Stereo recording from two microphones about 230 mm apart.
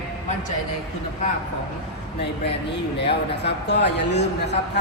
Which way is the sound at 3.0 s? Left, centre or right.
Left.